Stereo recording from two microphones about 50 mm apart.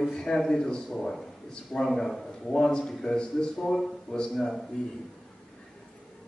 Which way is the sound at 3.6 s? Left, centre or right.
Centre.